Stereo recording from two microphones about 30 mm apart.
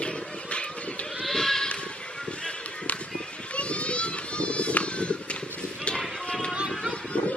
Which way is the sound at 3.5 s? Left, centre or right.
Left.